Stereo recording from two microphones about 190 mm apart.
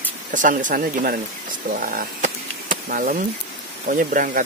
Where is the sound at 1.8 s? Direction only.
45° right (ahead or behind).